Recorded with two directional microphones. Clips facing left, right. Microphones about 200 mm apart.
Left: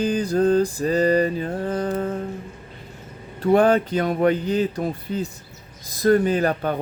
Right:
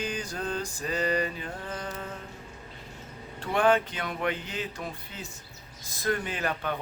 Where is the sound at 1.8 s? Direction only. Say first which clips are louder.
Left 13 dB; 50° left (ahead or behind).